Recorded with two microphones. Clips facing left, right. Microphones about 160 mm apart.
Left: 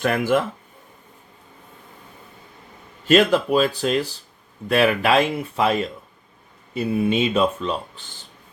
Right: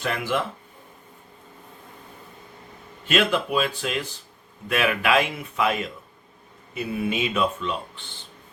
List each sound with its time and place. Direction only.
0.0 s speech: 50° left (ahead or behind)
3.1 s speech: 40° left (ahead or behind)